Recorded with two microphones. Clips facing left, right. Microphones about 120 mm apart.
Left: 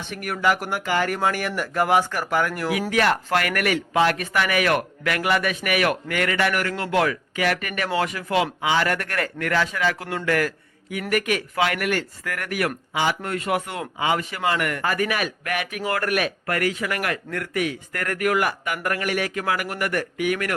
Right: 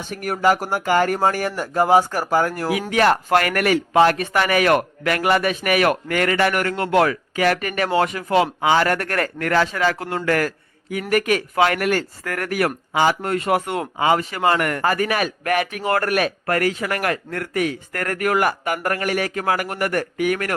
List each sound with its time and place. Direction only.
0.0 s a man's voice: 35° right (ahead or behind)
13.2 s a man's voice: 30° right (ahead or behind)